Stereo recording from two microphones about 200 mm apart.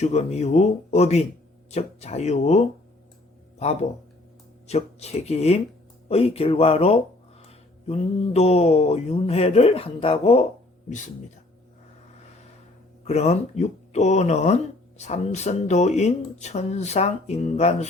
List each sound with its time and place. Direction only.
0.0 s speech: 35° left (ahead or behind)
4.6 s speech: 30° left (ahead or behind)
13.1 s speech: 30° left (ahead or behind)